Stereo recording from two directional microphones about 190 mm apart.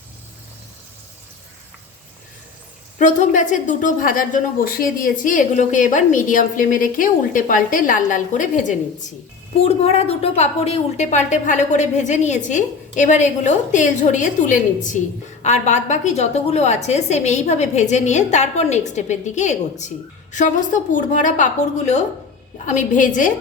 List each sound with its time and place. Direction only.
3.0 s a woman's voice: 40° left (ahead or behind)